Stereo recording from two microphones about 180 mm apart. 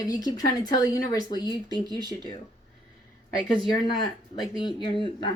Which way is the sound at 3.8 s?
25° left (ahead or behind).